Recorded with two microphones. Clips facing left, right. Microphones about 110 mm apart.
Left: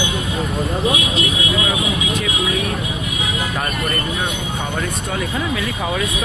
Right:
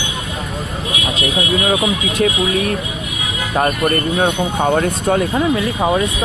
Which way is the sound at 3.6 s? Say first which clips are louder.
Right 6 dB; 50° right (ahead or behind).